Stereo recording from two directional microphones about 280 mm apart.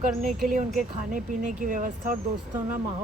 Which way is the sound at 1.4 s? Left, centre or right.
Right.